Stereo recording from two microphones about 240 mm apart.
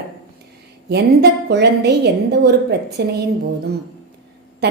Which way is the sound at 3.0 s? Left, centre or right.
Right.